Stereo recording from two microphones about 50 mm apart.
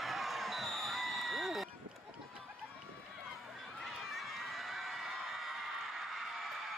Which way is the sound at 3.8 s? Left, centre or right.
Centre.